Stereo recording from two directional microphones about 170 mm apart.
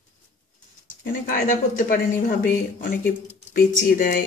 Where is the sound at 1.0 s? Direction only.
50° left (ahead or behind).